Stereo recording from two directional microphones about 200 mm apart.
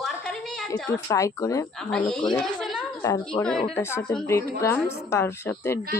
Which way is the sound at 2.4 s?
Centre (ahead or behind).